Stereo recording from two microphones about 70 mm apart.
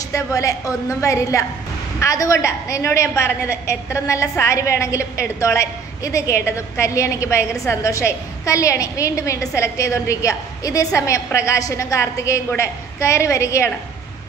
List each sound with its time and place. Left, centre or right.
0.1 s a woman's voice: left